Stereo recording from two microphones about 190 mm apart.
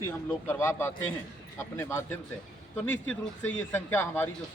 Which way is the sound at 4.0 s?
10° left (ahead or behind).